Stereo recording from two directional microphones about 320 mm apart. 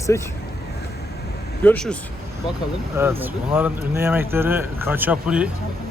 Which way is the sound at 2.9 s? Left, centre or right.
Centre.